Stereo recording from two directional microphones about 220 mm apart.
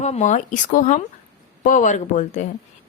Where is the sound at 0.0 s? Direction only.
30° left (ahead or behind).